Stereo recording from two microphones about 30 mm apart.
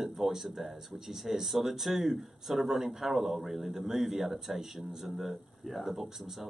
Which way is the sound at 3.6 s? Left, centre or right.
Centre.